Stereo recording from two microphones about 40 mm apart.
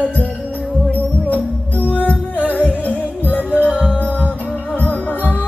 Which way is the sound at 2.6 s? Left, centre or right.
Right.